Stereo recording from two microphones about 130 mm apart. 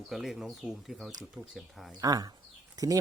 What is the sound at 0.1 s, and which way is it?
Speech, centre (ahead or behind).